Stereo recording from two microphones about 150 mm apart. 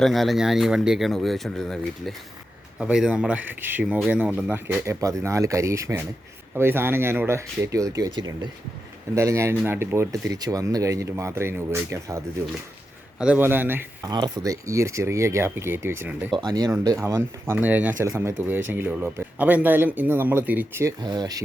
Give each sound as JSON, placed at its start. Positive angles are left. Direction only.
{"t": 0.0, "sound": "speech", "side_deg": 0}
{"t": 13.1, "sound": "speech", "side_deg": -10}
{"t": 14.1, "sound": "speech", "side_deg": -25}
{"t": 16.3, "sound": "speech", "side_deg": -30}
{"t": 21.0, "sound": "speech", "side_deg": -30}